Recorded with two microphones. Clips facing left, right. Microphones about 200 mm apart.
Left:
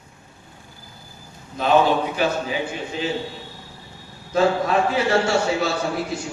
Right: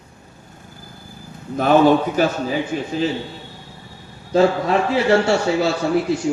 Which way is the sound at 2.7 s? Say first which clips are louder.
Right 6 dB; 40° right (ahead or behind).